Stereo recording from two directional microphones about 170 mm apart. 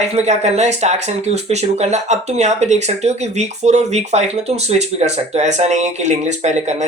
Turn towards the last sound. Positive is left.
turn(degrees=-45)  # may be behind; listen again after turning